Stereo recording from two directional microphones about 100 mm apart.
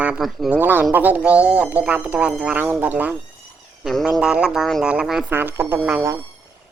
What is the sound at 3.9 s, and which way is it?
Speech, centre (ahead or behind).